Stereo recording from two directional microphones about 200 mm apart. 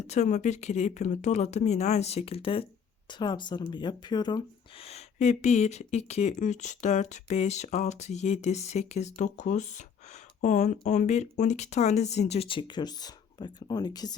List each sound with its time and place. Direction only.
0.1 s speech: 35° left (ahead or behind); by 14.2 s 20° left (ahead or behind)